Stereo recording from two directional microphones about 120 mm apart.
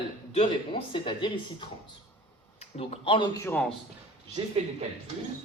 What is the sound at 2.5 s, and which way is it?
Speech, 60° left (ahead or behind).